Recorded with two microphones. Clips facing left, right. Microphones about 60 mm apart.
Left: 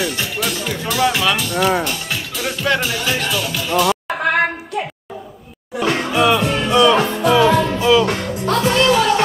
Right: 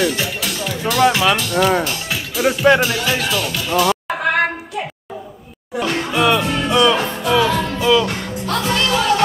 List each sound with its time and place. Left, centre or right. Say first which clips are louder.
0.0 s speech: right 2 dB; centre
2.8 s music: right 2 dB; centre
8.6 s music: left 3 dB; left